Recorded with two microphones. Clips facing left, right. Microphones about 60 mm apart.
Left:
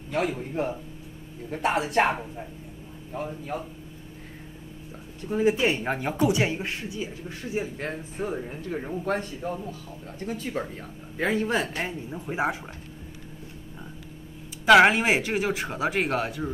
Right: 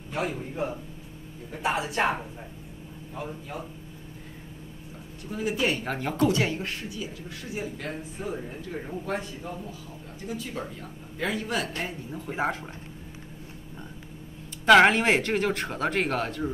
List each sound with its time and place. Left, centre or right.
0.1 s speech: left
5.3 s speech: left
12.1 s speech: centre
14.7 s speech: centre